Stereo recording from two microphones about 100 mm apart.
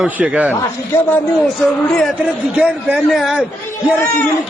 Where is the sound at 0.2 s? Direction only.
15° right (ahead or behind).